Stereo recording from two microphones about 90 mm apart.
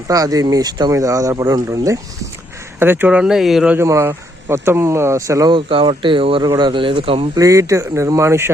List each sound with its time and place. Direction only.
0.1 s speech: 40° right (ahead or behind)
2.7 s speech: 25° right (ahead or behind)
3.2 s speech: 5° right (ahead or behind)
3.8 s speech: 30° right (ahead or behind)
5.5 s speech: 75° right (ahead or behind); by 7.3 s 90° right
7.3 s speech: 35° right (ahead or behind)